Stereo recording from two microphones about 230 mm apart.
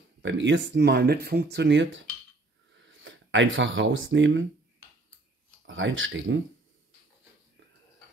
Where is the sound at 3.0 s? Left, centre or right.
Right.